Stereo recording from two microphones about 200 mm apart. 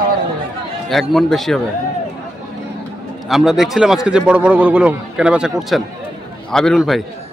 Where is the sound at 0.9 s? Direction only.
Centre (ahead or behind).